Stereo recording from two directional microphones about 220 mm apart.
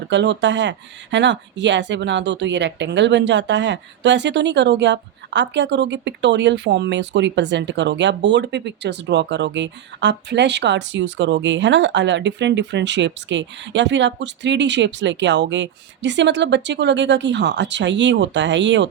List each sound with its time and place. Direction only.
0.1 s speech: 55° right (ahead or behind)